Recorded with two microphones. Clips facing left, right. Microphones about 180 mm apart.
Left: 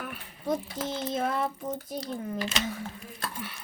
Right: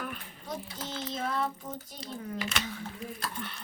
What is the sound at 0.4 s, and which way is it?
Speech, 50° left (ahead or behind).